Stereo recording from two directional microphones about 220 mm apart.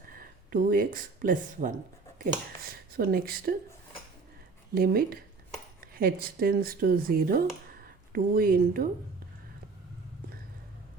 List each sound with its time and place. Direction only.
0.1 s speech: 40° right (ahead or behind)
4.7 s speech: 45° right (ahead or behind)